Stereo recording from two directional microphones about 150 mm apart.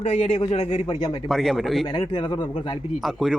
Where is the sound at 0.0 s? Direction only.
40° left (ahead or behind).